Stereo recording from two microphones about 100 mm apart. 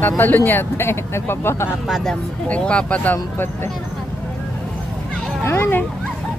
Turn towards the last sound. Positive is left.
turn(degrees=20)  # may be behind; listen again after turning